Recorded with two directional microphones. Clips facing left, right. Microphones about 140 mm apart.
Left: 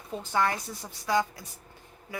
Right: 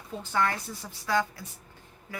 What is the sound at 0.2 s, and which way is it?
A woman's voice, 15° left (ahead or behind).